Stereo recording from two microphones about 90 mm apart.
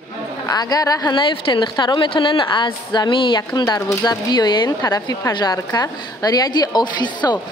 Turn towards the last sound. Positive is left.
turn(degrees=50)  # may be behind; listen again after turning